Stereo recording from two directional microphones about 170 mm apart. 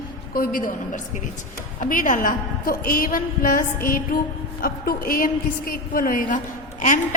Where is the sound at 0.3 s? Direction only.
55° left (ahead or behind).